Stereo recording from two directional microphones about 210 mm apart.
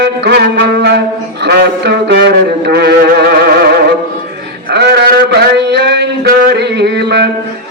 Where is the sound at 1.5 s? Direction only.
55° right (ahead or behind).